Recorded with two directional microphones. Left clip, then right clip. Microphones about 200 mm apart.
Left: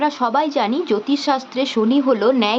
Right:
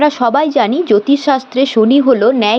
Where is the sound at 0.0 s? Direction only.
25° right (ahead or behind).